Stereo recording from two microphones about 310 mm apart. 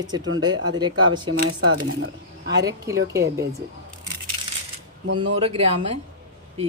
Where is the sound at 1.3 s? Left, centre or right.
Right.